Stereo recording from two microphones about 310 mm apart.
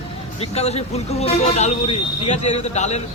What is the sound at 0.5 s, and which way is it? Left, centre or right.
Speech, centre.